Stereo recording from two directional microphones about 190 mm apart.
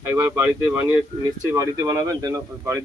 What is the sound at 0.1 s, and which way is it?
Speech, 15° right (ahead or behind).